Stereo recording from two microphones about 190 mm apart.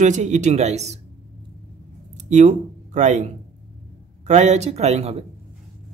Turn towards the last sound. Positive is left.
turn(degrees=-35)  # may be behind; listen again after turning